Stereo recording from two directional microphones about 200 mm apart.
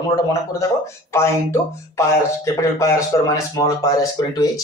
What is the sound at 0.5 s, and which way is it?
Speech, 15° left (ahead or behind).